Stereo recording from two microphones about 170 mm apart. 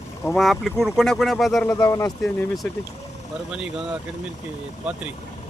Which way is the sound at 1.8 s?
20° left (ahead or behind).